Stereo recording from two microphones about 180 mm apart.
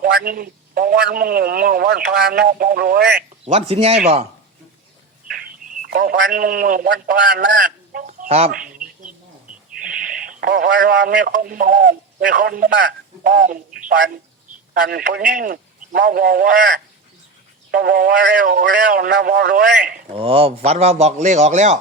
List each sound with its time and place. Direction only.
0.0 s a man's voice: 55° right (ahead or behind)
3.4 s a man's voice: 35° right (ahead or behind)
5.8 s speech: 55° right (ahead or behind)
8.4 s bird: 5° right (ahead or behind)
9.8 s radio: 50° right (ahead or behind)
11.3 s speech: 50° right (ahead or behind)
14.7 s a man's voice: 60° right (ahead or behind)
17.7 s a man's voice: 55° right (ahead or behind)
20.1 s a man's voice: 30° right (ahead or behind)